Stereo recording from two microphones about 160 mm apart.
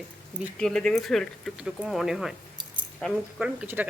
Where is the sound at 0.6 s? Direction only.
5° left (ahead or behind).